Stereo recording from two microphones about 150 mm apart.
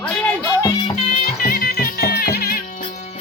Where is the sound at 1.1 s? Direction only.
75° left (ahead or behind).